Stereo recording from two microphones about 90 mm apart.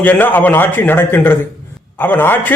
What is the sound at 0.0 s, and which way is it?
A man's voice, 20° left (ahead or behind).